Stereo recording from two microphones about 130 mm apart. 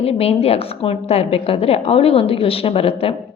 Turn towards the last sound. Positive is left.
turn(degrees=45)  # may be behind; listen again after turning